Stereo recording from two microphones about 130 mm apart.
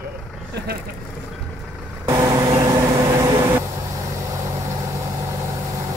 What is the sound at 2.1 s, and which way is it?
Vehicle, 25° right (ahead or behind).